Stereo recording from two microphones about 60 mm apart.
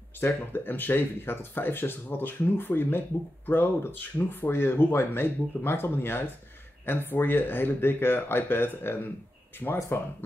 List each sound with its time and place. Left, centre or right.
0.2 s speech: left
9.6 s speech: left